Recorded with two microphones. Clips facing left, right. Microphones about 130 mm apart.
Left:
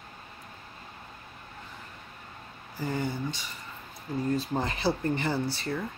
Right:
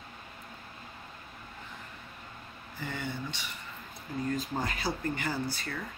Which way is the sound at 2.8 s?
40° left (ahead or behind).